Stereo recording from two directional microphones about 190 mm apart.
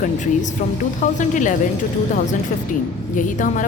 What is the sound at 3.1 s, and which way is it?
Speech, 45° left (ahead or behind).